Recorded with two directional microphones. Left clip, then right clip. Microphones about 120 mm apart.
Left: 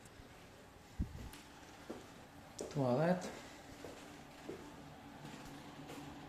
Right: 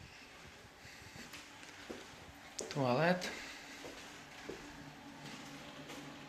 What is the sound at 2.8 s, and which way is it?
Speech, 15° left (ahead or behind).